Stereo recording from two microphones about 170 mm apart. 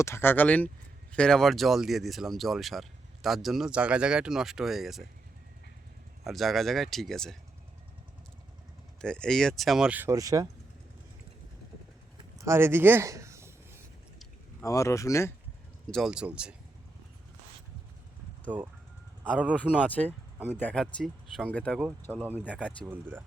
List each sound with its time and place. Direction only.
0.0 s speech: 15° left (ahead or behind); by 5.0 s centre (ahead or behind)
6.2 s speech: centre (ahead or behind)
9.0 s speech: 5° left (ahead or behind); by 10.5 s 20° right (ahead or behind)
12.4 s a sound: 15° right (ahead or behind)
14.6 s speech: 20° left (ahead or behind)
15.9 s speech: centre (ahead or behind)
18.5 s speech: 10° right (ahead or behind)
19.7 s speech: 5° right (ahead or behind)
20.5 s speech: 10° left (ahead or behind)
22.1 s speech: 10° right (ahead or behind)